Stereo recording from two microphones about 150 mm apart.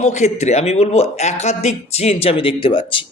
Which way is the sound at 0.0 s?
50° left (ahead or behind).